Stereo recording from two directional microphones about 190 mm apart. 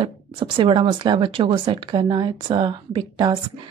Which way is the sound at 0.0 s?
25° right (ahead or behind).